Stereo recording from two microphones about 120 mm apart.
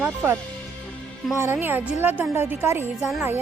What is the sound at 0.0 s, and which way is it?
Speech, 20° right (ahead or behind).